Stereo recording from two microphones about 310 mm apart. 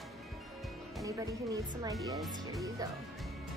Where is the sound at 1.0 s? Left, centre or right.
Centre.